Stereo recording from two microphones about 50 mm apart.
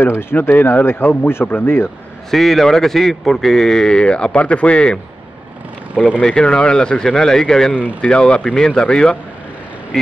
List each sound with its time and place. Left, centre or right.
0.0 s speech: left
2.3 s speech: centre
6.2 s speech: centre